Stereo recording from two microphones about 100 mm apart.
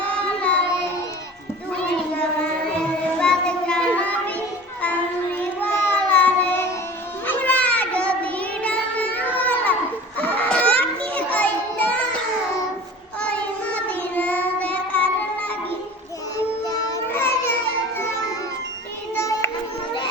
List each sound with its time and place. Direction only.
0.3 s child singing: 10° left (ahead or behind)
3.2 s music: 10° left (ahead or behind)
5.9 s carnatic music: 15° left (ahead or behind)
7.3 s child singing: 15° left (ahead or behind)
10.2 s children playing: 15° left (ahead or behind)
13.2 s child singing: 15° left (ahead or behind)
17.1 s a sound: 25° left (ahead or behind)
19.1 s music: 30° left (ahead or behind)